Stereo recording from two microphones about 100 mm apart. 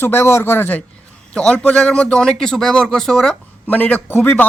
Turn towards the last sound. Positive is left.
turn(degrees=20)  # may be behind; listen again after turning